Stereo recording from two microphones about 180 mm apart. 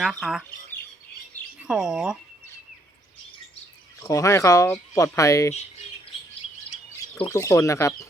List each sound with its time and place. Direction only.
0.0 s speech: 5° right (ahead or behind)
1.5 s speech: 5° right (ahead or behind)
4.0 s speech: 15° left (ahead or behind)
7.2 s speech: 15° left (ahead or behind)